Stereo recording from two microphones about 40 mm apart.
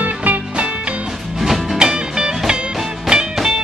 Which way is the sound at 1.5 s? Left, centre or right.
Centre.